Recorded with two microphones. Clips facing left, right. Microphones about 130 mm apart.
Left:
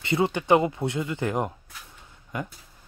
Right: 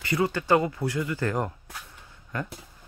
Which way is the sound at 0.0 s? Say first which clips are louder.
Left 2 dB; 25° left (ahead or behind).